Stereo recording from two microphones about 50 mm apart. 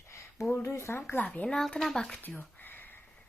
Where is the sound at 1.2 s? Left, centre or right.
Left.